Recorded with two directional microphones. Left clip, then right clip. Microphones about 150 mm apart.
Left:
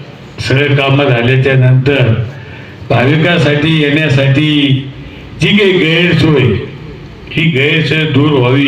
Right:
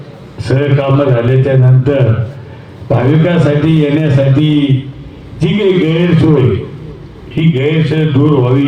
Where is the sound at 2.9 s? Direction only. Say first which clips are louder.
Left 2 dB; 20° left (ahead or behind).